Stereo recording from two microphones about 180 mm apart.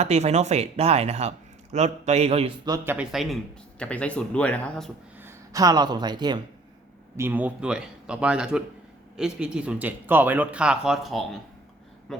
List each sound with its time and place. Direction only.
0.0 s speech: 35° right (ahead or behind)
2.6 s speech: 15° right (ahead or behind); by 4.9 s 5° left (ahead or behind)
5.2 s speech: 20° right (ahead or behind)
7.2 s speech: 10° right (ahead or behind)